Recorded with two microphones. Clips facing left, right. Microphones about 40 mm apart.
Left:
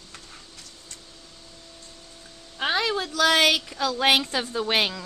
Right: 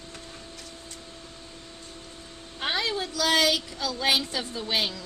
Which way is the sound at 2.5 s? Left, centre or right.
Left.